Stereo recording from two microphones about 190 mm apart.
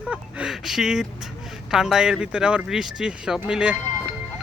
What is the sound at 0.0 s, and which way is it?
Speech, 5° right (ahead or behind).